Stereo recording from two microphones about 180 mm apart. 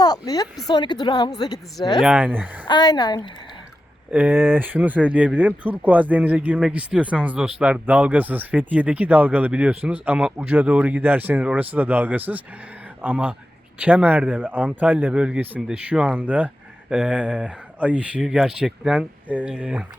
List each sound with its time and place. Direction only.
0.0 s a woman's voice: 20° left (ahead or behind)
2.0 s speech: 5° right (ahead or behind)
2.6 s a woman's voice: 25° left (ahead or behind)
4.1 s speech: 10° right (ahead or behind)